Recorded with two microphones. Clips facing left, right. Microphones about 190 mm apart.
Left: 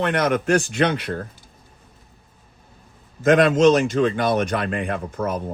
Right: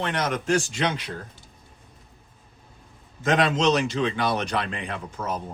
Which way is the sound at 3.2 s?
50° left (ahead or behind).